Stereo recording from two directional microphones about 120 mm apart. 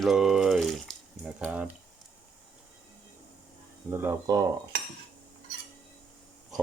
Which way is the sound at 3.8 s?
20° right (ahead or behind).